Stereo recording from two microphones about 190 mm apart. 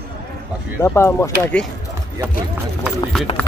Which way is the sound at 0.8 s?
15° left (ahead or behind).